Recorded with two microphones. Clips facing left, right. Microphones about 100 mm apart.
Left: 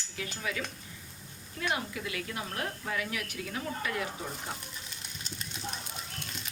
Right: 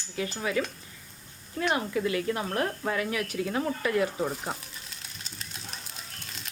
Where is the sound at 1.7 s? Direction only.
40° right (ahead or behind).